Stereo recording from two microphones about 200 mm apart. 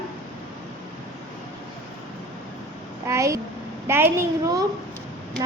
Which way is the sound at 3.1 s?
15° right (ahead or behind).